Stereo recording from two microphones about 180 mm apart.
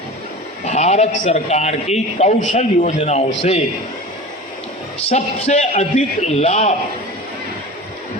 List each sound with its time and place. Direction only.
0.6 s a man's voice: 40° left (ahead or behind)
5.0 s a man's voice: 40° left (ahead or behind)